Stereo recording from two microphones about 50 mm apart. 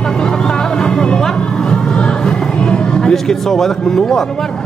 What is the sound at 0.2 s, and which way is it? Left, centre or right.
Music, centre.